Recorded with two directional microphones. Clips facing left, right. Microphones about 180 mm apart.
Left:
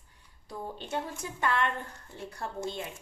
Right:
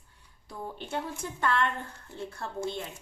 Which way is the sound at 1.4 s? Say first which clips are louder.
Right 1 dB; 15° left (ahead or behind).